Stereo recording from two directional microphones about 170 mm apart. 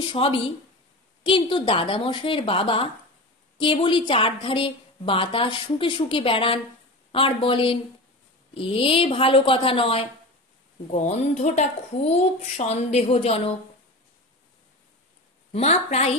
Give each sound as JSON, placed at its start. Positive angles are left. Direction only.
{"t": 0.0, "sound": "a woman's voice", "side_deg": 30}
{"t": 15.5, "sound": "a woman's voice", "side_deg": 40}